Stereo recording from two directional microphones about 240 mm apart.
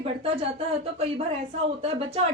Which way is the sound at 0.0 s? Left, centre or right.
Right.